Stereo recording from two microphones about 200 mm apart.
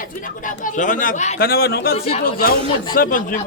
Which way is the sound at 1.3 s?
50° left (ahead or behind).